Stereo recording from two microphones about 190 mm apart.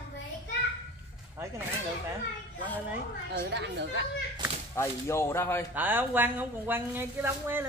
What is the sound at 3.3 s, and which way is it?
Speech, 65° right (ahead or behind).